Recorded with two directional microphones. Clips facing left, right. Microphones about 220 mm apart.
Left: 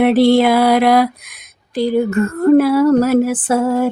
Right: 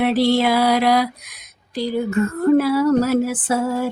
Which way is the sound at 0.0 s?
55° left (ahead or behind).